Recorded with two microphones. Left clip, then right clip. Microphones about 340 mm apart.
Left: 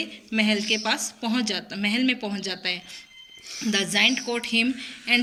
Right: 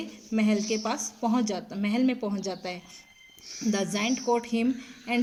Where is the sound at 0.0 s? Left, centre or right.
Centre.